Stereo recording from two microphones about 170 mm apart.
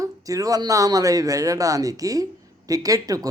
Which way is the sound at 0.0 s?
20° right (ahead or behind).